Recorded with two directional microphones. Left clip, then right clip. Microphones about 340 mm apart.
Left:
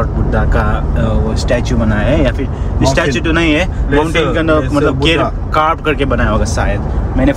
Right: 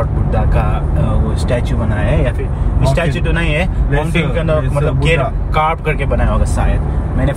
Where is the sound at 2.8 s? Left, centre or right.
Centre.